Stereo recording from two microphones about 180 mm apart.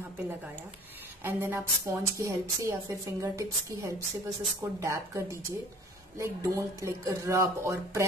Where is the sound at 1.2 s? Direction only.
10° right (ahead or behind).